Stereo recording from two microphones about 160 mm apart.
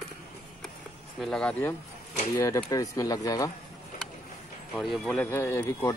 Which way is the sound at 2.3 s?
20° left (ahead or behind).